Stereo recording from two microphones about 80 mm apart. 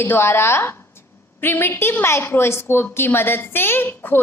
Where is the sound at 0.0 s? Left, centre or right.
Left.